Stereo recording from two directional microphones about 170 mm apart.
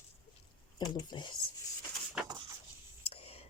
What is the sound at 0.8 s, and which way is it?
Speech, 25° left (ahead or behind).